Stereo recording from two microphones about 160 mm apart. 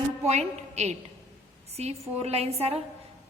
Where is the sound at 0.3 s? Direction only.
45° right (ahead or behind).